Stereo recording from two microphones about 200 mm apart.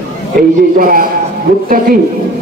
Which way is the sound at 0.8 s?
45° right (ahead or behind).